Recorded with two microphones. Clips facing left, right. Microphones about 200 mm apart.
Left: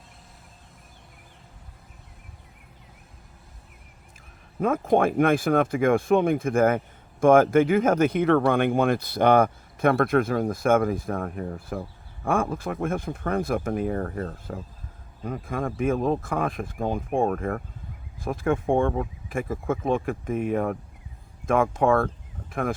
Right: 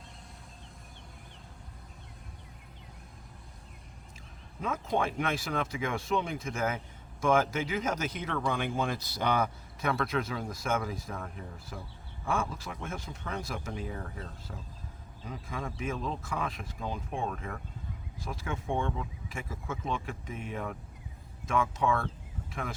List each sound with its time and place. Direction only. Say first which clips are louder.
4.6 s speech: left 10 dB; 55° left (ahead or behind)